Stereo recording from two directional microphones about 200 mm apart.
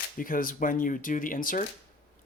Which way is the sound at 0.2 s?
45° left (ahead or behind).